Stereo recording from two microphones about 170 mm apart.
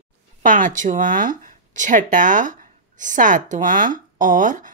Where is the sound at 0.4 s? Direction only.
50° right (ahead or behind).